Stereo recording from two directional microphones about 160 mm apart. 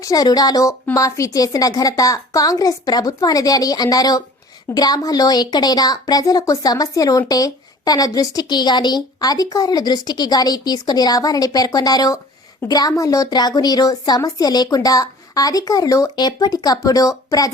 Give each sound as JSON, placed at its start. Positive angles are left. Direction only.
{"t": 0.0, "sound": "a woman's voice", "side_deg": 25}